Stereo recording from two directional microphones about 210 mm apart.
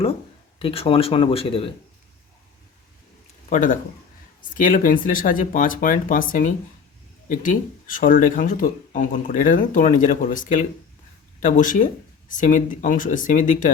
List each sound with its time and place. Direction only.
0.6 s speech: 25° left (ahead or behind)
3.5 s speech: 40° left (ahead or behind)